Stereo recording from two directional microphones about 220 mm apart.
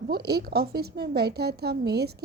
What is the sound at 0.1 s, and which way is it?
A woman's voice, 45° right (ahead or behind).